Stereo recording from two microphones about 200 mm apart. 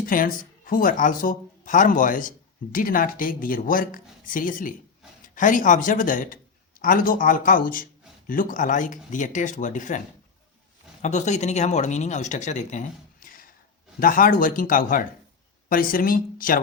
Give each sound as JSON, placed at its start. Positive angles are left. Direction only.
{"t": 0.0, "sound": "a man's voice", "side_deg": 45}
{"t": 11.0, "sound": "speech", "side_deg": 35}